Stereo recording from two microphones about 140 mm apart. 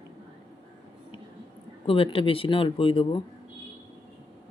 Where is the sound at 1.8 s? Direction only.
40° left (ahead or behind).